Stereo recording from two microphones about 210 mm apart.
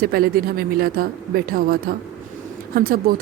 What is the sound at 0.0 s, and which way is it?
Speech, 45° right (ahead or behind).